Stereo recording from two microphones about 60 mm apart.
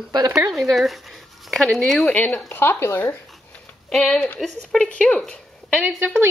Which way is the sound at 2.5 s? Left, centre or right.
Left.